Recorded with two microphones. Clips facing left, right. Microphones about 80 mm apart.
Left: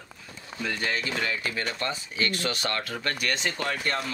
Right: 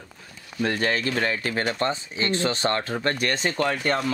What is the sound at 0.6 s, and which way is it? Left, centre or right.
A man's voice, right.